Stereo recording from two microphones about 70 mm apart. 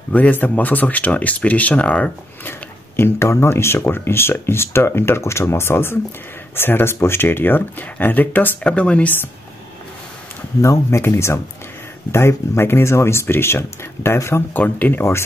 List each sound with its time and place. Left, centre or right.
0.1 s speech: left
3.0 s speech: left
8.6 s speech: centre
10.6 s speech: left
14.6 s speech: left